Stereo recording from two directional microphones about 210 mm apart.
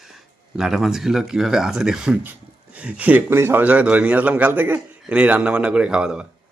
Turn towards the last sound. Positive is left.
turn(degrees=-5)  # may be behind; listen again after turning